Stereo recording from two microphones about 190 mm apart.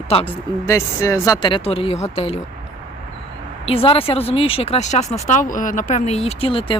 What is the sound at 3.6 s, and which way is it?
Speech, 30° left (ahead or behind).